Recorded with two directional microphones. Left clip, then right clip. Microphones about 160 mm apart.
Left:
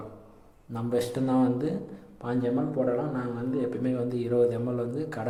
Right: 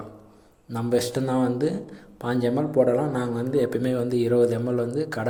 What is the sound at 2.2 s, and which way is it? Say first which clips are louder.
Speech: right 4 dB; 30° right (ahead or behind).